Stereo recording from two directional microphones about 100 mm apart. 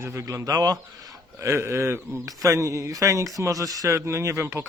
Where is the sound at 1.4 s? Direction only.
25° right (ahead or behind).